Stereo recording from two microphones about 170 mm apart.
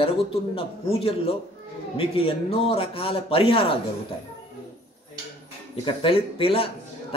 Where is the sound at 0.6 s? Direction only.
35° left (ahead or behind).